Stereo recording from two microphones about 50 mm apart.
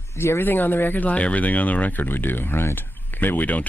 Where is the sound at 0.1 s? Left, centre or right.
Left.